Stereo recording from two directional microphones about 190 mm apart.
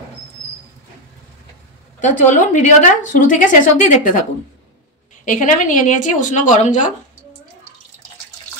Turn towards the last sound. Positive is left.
turn(degrees=40)  # may be behind; listen again after turning